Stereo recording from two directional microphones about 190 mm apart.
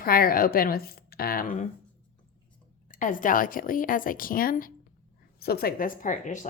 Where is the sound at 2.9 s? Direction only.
45° left (ahead or behind).